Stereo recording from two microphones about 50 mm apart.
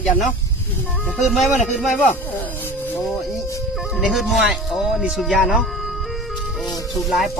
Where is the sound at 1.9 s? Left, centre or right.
Left.